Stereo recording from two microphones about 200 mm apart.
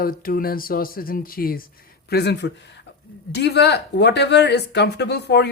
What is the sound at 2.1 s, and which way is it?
Speech, 55° left (ahead or behind).